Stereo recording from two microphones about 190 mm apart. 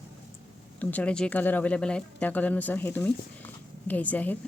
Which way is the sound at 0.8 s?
10° left (ahead or behind).